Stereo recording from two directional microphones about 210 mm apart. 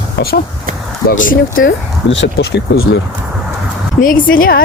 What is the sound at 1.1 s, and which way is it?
Speech, 40° left (ahead or behind).